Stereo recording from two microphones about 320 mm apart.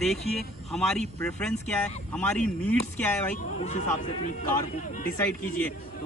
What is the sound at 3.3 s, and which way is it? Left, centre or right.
Speech, left.